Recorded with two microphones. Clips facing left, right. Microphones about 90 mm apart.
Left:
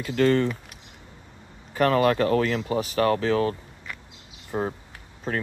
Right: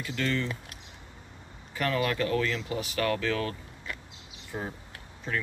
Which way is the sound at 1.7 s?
40° left (ahead or behind).